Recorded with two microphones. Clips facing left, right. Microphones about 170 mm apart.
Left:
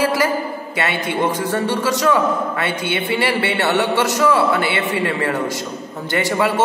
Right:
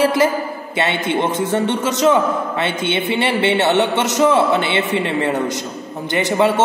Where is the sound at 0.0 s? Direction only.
25° right (ahead or behind).